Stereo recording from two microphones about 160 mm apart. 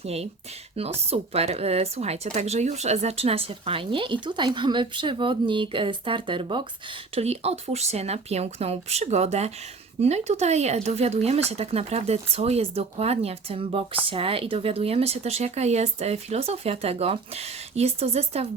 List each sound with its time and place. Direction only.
0.0 s speech: 40° right (ahead or behind)